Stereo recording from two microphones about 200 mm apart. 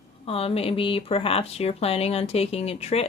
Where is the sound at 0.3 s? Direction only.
30° left (ahead or behind).